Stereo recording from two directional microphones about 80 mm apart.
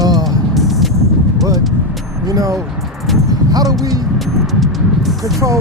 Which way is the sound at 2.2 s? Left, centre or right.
Right.